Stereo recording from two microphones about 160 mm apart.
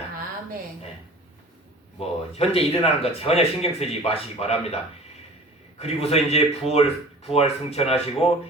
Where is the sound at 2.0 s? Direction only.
40° left (ahead or behind).